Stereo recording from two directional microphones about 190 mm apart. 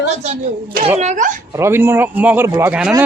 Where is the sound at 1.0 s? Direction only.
40° right (ahead or behind).